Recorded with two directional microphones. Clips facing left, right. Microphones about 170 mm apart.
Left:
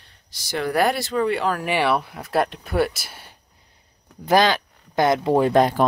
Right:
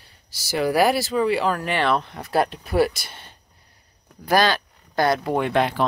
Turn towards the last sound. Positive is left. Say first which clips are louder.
# left 4 dB
turn(degrees=40)  # may be behind; listen again after turning